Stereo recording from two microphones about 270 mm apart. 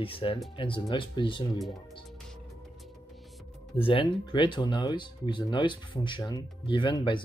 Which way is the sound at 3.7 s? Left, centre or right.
Centre.